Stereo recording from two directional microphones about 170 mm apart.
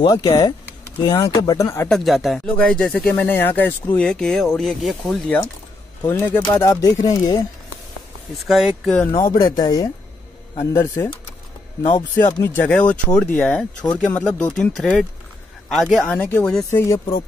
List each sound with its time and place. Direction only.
0.0 s speech: 25° left (ahead or behind)
1.9 s speech: centre (ahead or behind)
6.0 s speech: 15° left (ahead or behind)
8.4 s speech: centre (ahead or behind)
9.4 s speech: 20° left (ahead or behind)
12.4 s speech: 15° left (ahead or behind)
16.8 s speech: 20° left (ahead or behind)